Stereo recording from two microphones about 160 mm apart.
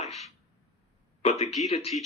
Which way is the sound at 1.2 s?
40° left (ahead or behind).